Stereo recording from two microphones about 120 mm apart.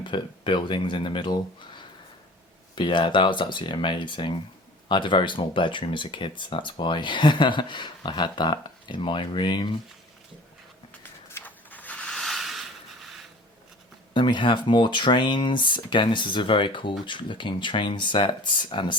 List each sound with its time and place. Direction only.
0.0 s speech: 45° left (ahead or behind)
11.3 s a sound: 15° left (ahead or behind)
14.1 s speech: 40° left (ahead or behind)